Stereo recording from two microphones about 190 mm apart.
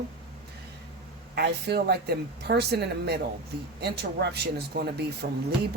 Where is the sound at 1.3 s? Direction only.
60° right (ahead or behind).